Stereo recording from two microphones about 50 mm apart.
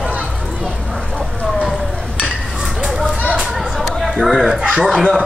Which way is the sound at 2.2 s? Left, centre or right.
Centre.